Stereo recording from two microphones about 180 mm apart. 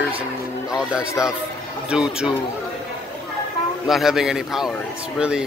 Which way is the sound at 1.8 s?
5° right (ahead or behind).